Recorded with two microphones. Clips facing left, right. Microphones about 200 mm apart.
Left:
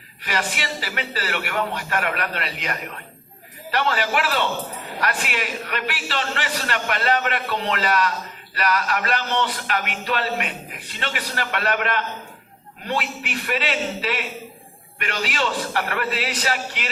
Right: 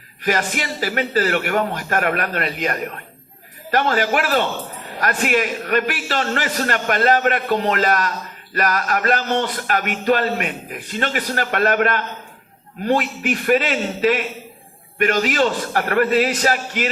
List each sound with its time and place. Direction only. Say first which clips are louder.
0.2 s a man's voice: right 6 dB; 45° right (ahead or behind)
13.0 s a man's voice: right 3 dB; centre (ahead or behind)
13.2 s a man's voice: right 8 dB; 45° right (ahead or behind)